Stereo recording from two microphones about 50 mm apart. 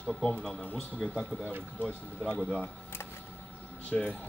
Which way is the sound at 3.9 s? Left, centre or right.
Left.